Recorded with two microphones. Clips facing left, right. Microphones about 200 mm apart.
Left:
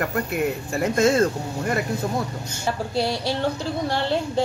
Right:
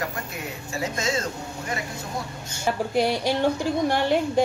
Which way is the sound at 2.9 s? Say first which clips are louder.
Right 2 dB; 15° right (ahead or behind).